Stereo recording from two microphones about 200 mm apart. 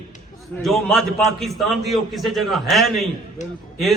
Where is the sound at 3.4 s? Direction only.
35° left (ahead or behind).